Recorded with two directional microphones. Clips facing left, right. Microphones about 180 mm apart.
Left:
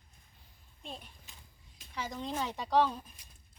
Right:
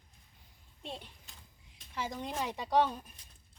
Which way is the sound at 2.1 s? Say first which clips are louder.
Left 1 dB; 10° right (ahead or behind).